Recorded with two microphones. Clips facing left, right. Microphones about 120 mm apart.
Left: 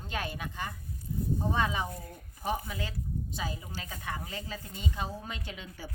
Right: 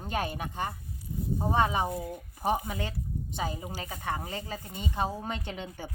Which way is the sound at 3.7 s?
45° right (ahead or behind).